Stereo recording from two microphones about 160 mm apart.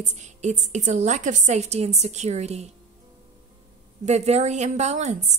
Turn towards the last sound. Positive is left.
turn(degrees=-45)  # may be behind; listen again after turning